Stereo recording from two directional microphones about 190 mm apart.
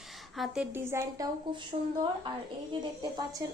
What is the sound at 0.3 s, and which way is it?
Speech, centre (ahead or behind).